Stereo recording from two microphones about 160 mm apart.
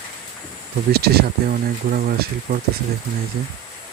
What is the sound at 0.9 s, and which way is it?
Speech, 80° right.